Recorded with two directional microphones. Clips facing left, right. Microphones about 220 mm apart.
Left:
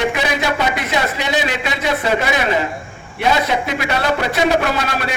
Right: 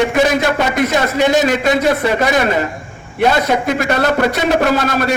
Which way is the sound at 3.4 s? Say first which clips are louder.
Right 5 dB; 45° right (ahead or behind).